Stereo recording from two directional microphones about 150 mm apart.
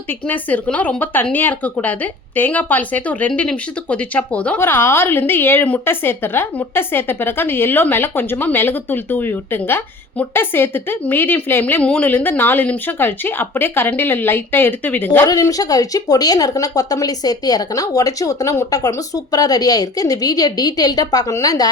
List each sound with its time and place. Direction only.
0.1 s speech: 10° left (ahead or behind)